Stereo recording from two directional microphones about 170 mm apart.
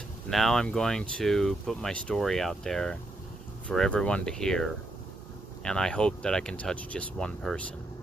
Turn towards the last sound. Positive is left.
turn(degrees=5)  # may be behind; listen again after turning